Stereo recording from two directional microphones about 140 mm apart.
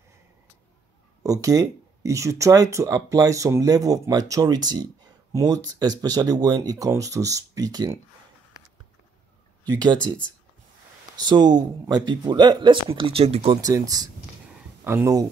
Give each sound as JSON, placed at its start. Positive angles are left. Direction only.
{"t": 1.2, "sound": "speech", "side_deg": -25}
{"t": 9.7, "sound": "speech", "side_deg": -30}
{"t": 9.9, "sound": "speech", "side_deg": 10}
{"t": 11.1, "sound": "speech", "side_deg": -30}
{"t": 13.5, "sound": "speech", "side_deg": -25}